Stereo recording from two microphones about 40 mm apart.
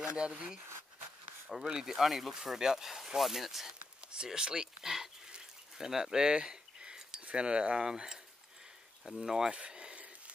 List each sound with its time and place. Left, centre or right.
0.0 s speech: right
1.5 s speech: centre
4.1 s speech: centre
5.9 s a sound: centre
7.2 s speech: right; by 9.5 s centre
9.5 s a sound: right